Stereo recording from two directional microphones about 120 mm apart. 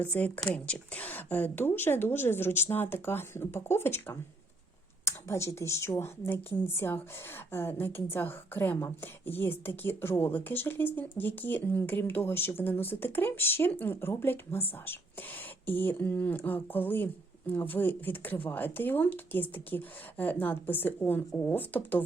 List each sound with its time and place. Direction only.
0.0 s a woman's voice: 10° left (ahead or behind)